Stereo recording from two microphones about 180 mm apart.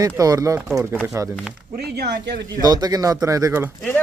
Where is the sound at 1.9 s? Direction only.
65° right (ahead or behind).